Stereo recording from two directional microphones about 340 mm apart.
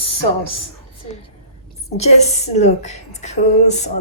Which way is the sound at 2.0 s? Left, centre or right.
Centre.